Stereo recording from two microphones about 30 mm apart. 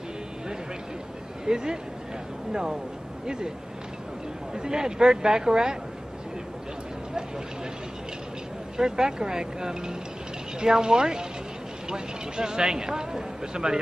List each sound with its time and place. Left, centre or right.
1.4 s speech: right
4.6 s speech: right
8.7 s speech: right